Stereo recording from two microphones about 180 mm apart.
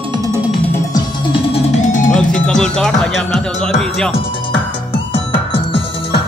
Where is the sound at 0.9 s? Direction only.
30° left (ahead or behind).